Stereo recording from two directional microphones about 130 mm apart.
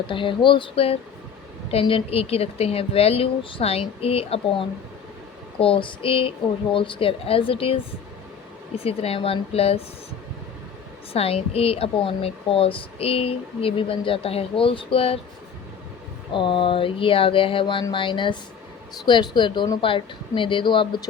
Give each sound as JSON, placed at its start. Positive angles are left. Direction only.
{"t": 0.1, "sound": "a woman's voice", "side_deg": 40}
{"t": 8.8, "sound": "a woman's voice", "side_deg": 50}
{"t": 11.1, "sound": "a woman's voice", "side_deg": 50}
{"t": 16.3, "sound": "a woman's voice", "side_deg": 40}